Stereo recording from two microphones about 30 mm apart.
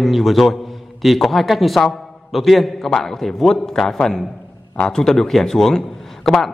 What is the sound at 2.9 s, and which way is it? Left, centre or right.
Speech, centre.